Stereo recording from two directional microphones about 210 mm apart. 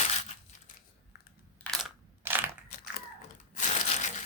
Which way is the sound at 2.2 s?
10° right (ahead or behind).